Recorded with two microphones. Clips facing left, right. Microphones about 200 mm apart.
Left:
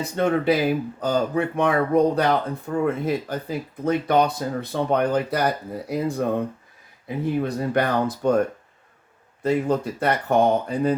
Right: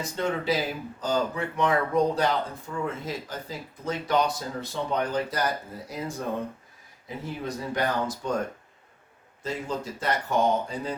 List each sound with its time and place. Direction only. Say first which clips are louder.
0.0 s speech: left 7 dB; 60° left (ahead or behind)
7.4 s speech: left 6 dB; 60° left (ahead or behind)
9.4 s speech: left 10 dB; 60° left (ahead or behind)